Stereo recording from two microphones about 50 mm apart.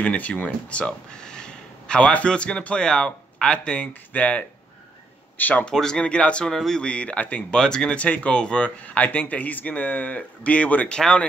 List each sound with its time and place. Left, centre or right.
0.0 s speech: left
5.7 s speech: centre
6.5 s speech: centre
6.8 s speech: left
7.5 s speech: centre
8.0 s speech: left
10.9 s speech: centre